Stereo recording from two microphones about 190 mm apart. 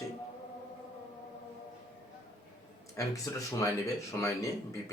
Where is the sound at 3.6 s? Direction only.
15° left (ahead or behind).